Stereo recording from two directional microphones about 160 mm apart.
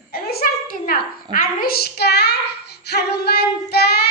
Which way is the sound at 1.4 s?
65° left (ahead or behind).